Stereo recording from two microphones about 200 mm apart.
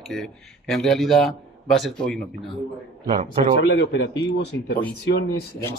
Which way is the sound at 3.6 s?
60° left (ahead or behind).